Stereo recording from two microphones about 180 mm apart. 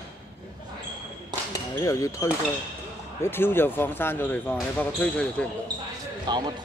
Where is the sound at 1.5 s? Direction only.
20° left (ahead or behind).